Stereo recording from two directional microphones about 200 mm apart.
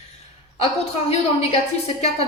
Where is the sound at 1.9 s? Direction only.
25° left (ahead or behind).